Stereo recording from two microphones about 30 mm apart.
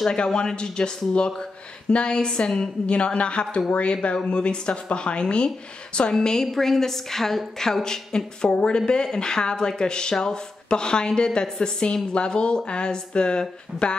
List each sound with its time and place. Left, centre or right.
0.1 s a woman's voice: left
6.1 s a woman's voice: centre